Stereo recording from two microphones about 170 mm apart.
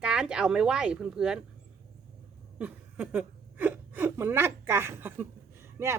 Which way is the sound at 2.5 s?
10° right (ahead or behind).